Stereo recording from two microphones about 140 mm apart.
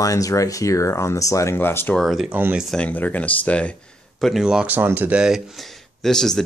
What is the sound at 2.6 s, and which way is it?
Speech, 10° left (ahead or behind).